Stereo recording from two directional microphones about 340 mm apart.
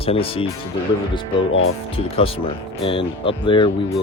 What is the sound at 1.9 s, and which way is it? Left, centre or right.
Speech, centre.